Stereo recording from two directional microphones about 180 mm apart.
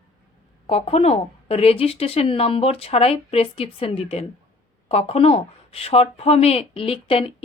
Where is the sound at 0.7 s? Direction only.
35° left (ahead or behind).